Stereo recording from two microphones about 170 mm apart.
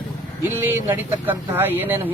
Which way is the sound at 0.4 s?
15° right (ahead or behind).